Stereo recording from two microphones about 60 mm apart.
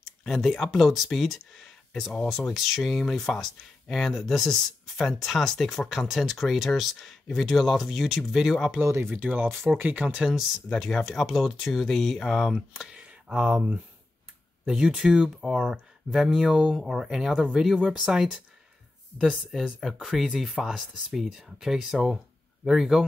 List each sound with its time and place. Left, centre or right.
0.2 s speech: centre
3.3 s speech: centre
3.9 s speech: centre
8.8 s speech: right
9.1 s speech: right
10.1 s speech: centre
10.7 s speech: centre
12.9 s speech: centre
16.1 s speech: centre